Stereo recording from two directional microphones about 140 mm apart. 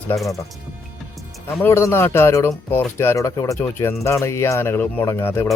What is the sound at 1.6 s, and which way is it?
Speech, 20° left (ahead or behind).